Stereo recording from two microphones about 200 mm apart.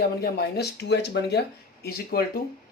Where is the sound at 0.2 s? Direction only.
55° left (ahead or behind).